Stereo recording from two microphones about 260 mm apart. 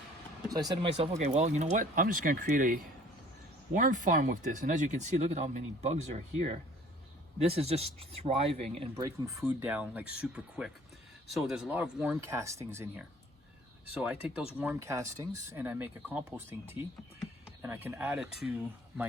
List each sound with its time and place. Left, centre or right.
0.8 s speech: centre
9.0 s speech: centre